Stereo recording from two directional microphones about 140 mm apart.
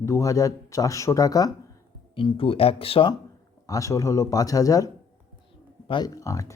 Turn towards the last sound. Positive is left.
turn(degrees=25)  # may be behind; listen again after turning